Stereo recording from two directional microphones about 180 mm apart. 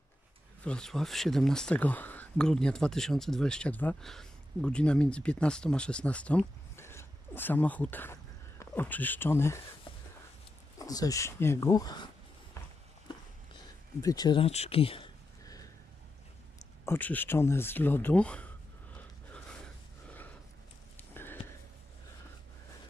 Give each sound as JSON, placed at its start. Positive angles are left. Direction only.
{"t": 0.7, "sound": "speech", "side_deg": 5}
{"t": 10.8, "sound": "speech", "side_deg": 20}
{"t": 14.0, "sound": "speech", "side_deg": 20}
{"t": 16.8, "sound": "speech", "side_deg": 10}
{"t": 18.9, "sound": "a sound", "side_deg": 5}